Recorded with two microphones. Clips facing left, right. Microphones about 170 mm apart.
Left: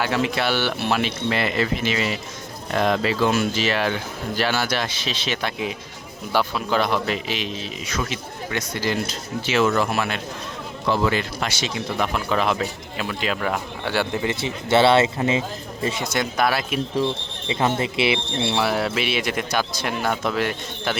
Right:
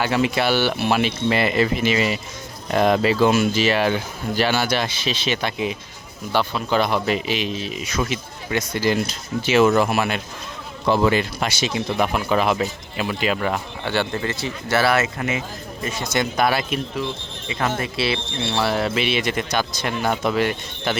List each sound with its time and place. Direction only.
0.0 s a man's voice: 5° right (ahead or behind); by 16.1 s 25° left (ahead or behind)
16.1 s a man's voice: centre (ahead or behind)
17.5 s speech: 20° left (ahead or behind)
18.6 s a man's voice: 5° left (ahead or behind)